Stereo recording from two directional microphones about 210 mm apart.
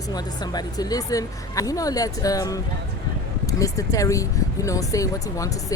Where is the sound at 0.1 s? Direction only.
20° left (ahead or behind).